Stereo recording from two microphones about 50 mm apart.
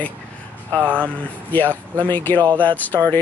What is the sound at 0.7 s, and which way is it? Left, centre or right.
Speech, right.